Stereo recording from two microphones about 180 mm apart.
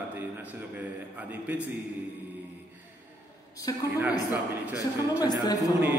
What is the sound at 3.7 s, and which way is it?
A man's voice, 20° left (ahead or behind).